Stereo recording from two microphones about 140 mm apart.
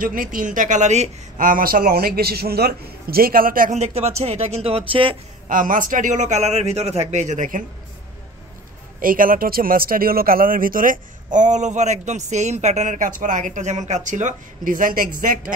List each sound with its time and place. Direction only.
0.0 s a man's voice: 80° right; by 1.1 s 55° right (ahead or behind)
1.4 s a man's voice: 85° right
3.7 s speech: 50° right (ahead or behind)
5.5 s a man's voice: 70° right (ahead or behind)
9.0 s a man's voice: 90° right